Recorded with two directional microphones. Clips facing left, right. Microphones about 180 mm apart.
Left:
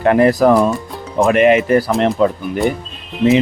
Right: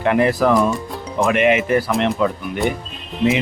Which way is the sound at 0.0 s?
45° left (ahead or behind).